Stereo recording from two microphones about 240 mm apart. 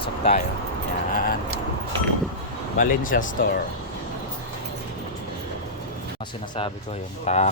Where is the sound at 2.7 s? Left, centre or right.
Left.